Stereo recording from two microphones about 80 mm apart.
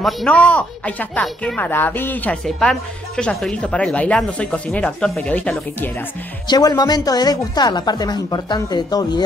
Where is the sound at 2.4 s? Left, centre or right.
Centre.